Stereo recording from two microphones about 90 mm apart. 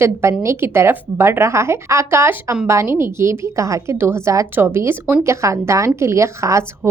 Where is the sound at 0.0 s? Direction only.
30° right (ahead or behind).